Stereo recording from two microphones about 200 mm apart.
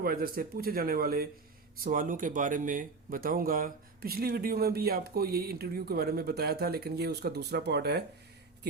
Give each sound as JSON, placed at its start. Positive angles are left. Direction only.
{"t": 0.0, "sound": "speech", "side_deg": -45}